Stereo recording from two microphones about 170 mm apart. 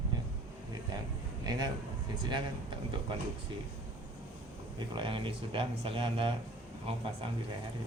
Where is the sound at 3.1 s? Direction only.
30° right (ahead or behind).